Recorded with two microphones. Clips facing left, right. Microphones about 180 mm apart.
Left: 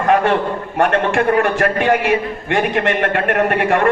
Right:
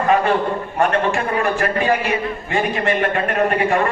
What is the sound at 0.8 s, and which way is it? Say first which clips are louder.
A man's voice: left 3 dB; 75° left (ahead or behind).